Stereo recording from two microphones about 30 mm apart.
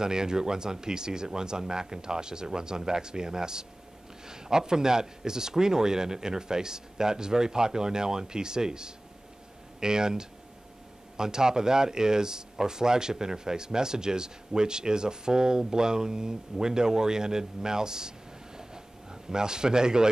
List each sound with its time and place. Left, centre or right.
0.0 s speech: right